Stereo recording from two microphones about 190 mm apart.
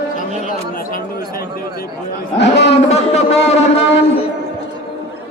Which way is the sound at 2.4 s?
65° left (ahead or behind).